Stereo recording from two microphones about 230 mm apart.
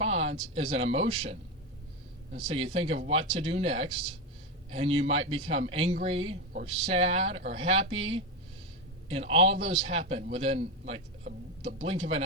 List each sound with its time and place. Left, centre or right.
0.0 s a man's voice: right